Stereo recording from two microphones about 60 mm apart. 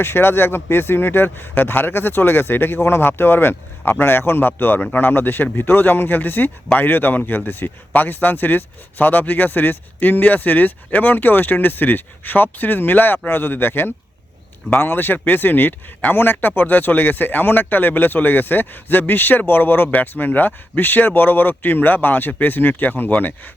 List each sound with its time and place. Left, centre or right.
0.0 s speech: left